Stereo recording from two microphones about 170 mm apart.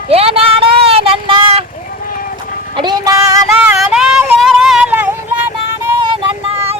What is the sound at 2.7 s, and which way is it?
Child singing, 25° right (ahead or behind).